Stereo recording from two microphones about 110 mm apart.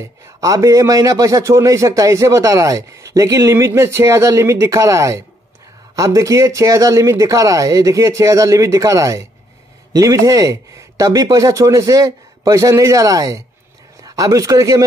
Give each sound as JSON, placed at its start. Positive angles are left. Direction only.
{"t": 0.0, "sound": "a man's voice", "side_deg": -30}